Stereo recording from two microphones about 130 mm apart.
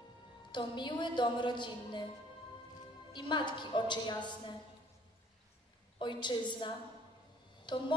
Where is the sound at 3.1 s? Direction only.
35° left (ahead or behind).